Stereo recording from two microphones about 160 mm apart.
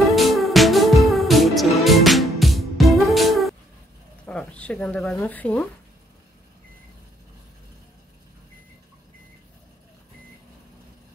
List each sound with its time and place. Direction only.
0.1 s music: centre (ahead or behind)
4.3 s a sound: 5° left (ahead or behind)
5.2 s speech: 10° left (ahead or behind)